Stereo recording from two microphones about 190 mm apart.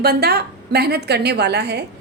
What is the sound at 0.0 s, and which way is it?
A woman's voice, 55° right (ahead or behind).